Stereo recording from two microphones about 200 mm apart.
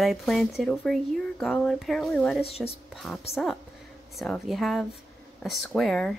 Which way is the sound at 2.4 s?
30° left (ahead or behind).